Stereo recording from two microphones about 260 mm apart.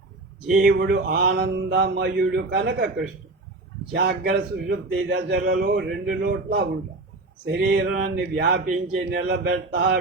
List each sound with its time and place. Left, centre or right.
0.5 s speech: right
3.9 s speech: right